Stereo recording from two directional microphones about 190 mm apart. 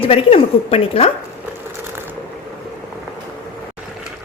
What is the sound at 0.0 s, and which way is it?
A woman's voice, 30° left (ahead or behind).